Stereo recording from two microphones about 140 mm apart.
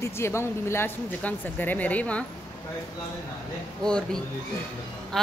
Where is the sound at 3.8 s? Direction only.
5° left (ahead or behind).